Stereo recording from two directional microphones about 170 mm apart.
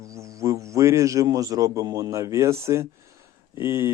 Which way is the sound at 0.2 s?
20° right (ahead or behind).